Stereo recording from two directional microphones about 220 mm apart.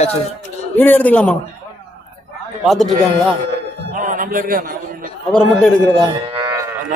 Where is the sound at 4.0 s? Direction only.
35° right (ahead or behind).